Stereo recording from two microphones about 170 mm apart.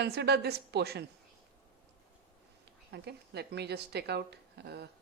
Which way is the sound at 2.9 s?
75° right (ahead or behind).